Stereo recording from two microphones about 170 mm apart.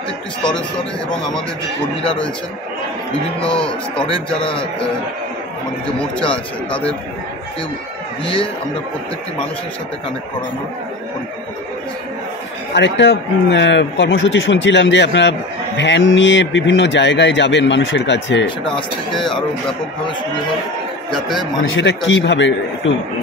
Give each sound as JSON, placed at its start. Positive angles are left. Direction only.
{"t": 3.6, "sound": "speech", "side_deg": 5}
{"t": 6.7, "sound": "speech", "side_deg": 5}
{"t": 12.7, "sound": "speech", "side_deg": 90}
{"t": 19.1, "sound": "speech", "side_deg": 0}
{"t": 21.1, "sound": "speech", "side_deg": 0}
{"t": 21.7, "sound": "speech", "side_deg": 90}